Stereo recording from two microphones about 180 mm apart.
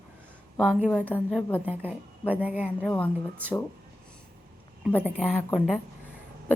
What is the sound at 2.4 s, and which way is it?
Speech, 10° right (ahead or behind).